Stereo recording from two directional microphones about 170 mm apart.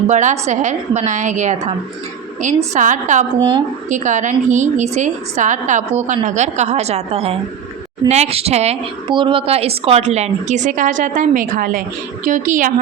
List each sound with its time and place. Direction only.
0.1 s a woman's voice: 45° right (ahead or behind)